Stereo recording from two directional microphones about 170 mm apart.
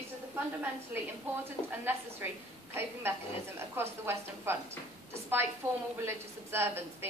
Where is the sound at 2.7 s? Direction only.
15° right (ahead or behind).